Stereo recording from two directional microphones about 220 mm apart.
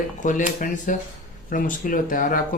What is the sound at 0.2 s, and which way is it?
Speech, 35° left (ahead or behind).